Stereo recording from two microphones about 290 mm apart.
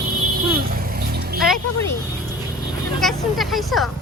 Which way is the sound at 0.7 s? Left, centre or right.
Right.